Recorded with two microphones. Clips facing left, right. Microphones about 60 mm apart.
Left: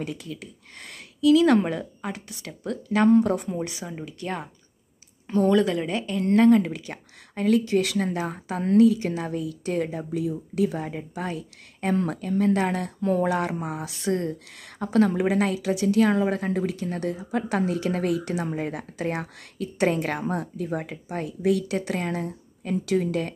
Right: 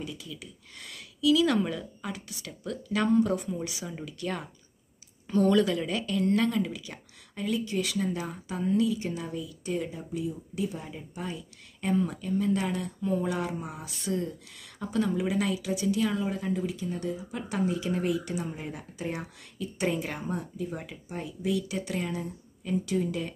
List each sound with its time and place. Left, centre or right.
0.0 s speech: left
3.8 s a woman's voice: left
15.7 s speech: left